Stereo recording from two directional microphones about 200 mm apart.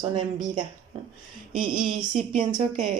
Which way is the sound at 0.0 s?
25° right (ahead or behind).